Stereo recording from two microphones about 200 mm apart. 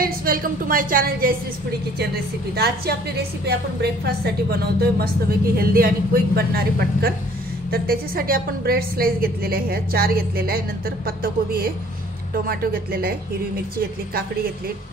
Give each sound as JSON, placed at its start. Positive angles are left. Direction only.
{"t": 0.0, "sound": "a woman's voice", "side_deg": -45}
{"t": 2.5, "sound": "a woman's voice", "side_deg": -55}